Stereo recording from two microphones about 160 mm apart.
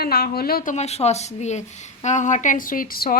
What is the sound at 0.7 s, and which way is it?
Speech, 45° left (ahead or behind).